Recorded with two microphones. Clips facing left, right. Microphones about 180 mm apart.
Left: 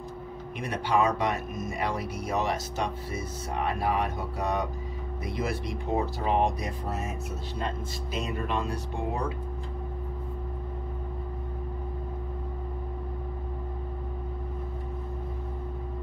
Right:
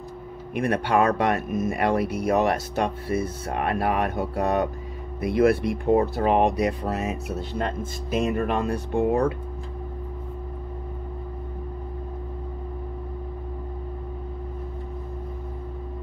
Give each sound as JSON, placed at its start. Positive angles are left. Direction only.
{"t": 0.6, "sound": "speech", "side_deg": -60}